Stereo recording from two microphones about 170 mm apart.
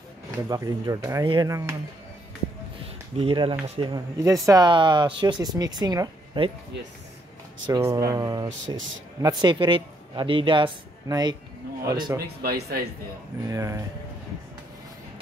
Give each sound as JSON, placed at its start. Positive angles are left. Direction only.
{"t": 0.5, "sound": "speech", "side_deg": -20}
{"t": 3.2, "sound": "speech", "side_deg": -30}
{"t": 3.9, "sound": "speech", "side_deg": -20}
{"t": 7.7, "sound": "speech", "side_deg": -20}
{"t": 12.4, "sound": "speech", "side_deg": -65}
{"t": 13.5, "sound": "speech", "side_deg": -20}